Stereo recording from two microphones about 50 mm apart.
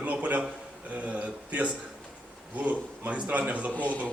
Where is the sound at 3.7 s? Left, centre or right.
Left.